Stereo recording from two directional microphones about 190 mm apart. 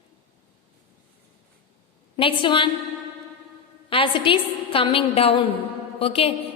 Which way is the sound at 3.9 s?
25° left (ahead or behind).